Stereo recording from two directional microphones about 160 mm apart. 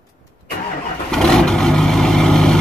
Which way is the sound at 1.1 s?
5° left (ahead or behind).